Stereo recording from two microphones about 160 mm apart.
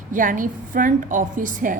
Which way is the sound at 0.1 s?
55° right (ahead or behind).